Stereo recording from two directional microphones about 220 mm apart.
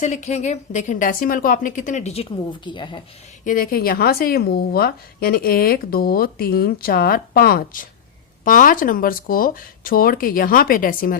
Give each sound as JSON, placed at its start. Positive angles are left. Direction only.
{"t": 0.0, "sound": "a woman's voice", "side_deg": 30}
{"t": 3.4, "sound": "a woman's voice", "side_deg": 40}